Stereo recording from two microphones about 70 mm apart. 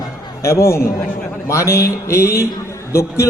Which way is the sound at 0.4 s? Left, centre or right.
Left.